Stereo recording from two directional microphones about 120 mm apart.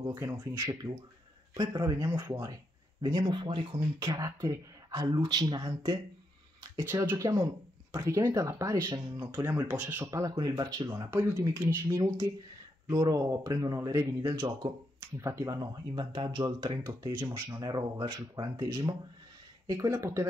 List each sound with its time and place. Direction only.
0.0 s speech: 25° right (ahead or behind)
1.5 s speech: 35° right (ahead or behind)
4.1 s speech: 25° right (ahead or behind)
6.8 s speech: 20° right (ahead or behind)
9.7 s speech: 10° right (ahead or behind)
10.3 s speech: 35° right (ahead or behind)